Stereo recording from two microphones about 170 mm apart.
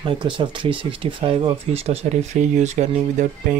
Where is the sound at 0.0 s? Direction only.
30° right (ahead or behind).